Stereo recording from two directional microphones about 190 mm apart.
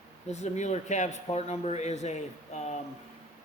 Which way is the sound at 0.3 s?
35° left (ahead or behind).